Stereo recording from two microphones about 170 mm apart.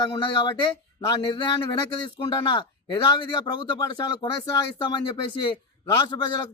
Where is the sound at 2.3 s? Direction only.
25° left (ahead or behind).